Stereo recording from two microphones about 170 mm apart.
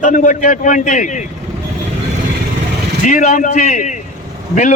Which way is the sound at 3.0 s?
45° left (ahead or behind).